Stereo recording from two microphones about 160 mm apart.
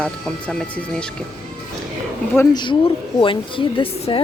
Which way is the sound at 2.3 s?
15° left (ahead or behind).